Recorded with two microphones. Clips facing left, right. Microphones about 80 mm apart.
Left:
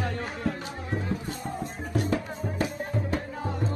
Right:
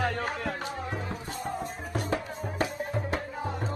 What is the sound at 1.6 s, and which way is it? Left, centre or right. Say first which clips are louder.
Music: left 3 dB; right.